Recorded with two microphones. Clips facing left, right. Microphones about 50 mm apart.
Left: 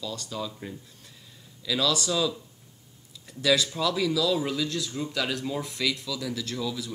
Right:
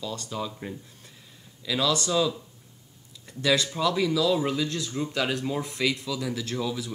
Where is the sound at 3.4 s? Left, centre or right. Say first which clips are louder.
Even; centre.